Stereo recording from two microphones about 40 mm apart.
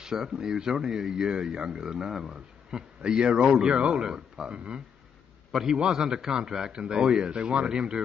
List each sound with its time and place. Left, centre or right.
0.0 s speech: centre